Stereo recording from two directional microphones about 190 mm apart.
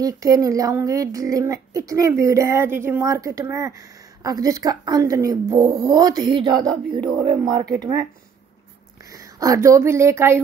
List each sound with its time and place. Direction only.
0.0 s speech: 15° right (ahead or behind)
9.1 s speech: 15° right (ahead or behind)